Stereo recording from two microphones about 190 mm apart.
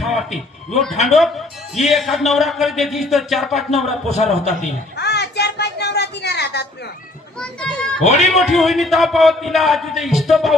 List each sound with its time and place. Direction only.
0.0 s music: centre (ahead or behind)
1.1 s a man's voice: centre (ahead or behind)
4.1 s a man's voice: 40° left (ahead or behind)
4.9 s a sound: 60° left (ahead or behind)
7.3 s a man's voice: 5° left (ahead or behind)
8.0 s a man's voice: 35° left (ahead or behind)
8.3 s a man's voice: centre (ahead or behind)